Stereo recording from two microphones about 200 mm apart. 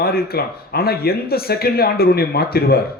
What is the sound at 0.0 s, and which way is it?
Speech, 50° left (ahead or behind).